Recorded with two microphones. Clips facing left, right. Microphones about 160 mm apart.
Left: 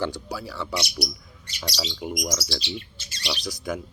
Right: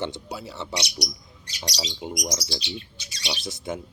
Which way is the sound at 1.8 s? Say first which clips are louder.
Left 2 dB; 25° right (ahead or behind).